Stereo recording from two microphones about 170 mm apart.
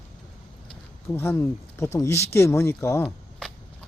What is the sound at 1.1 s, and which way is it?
Speech, 15° left (ahead or behind).